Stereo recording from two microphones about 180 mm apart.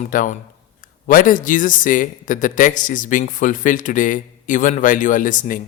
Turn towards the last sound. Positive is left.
turn(degrees=45)  # may be behind; listen again after turning